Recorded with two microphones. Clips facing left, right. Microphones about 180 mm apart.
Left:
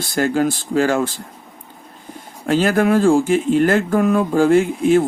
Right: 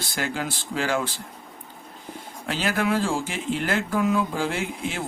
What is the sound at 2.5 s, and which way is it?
Speech, 45° left (ahead or behind).